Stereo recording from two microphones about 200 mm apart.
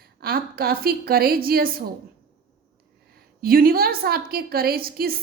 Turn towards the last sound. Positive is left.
turn(degrees=-50)  # may be behind; listen again after turning